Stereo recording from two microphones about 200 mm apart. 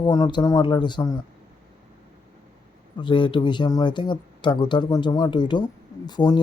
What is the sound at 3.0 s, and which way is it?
Speech, 25° left (ahead or behind).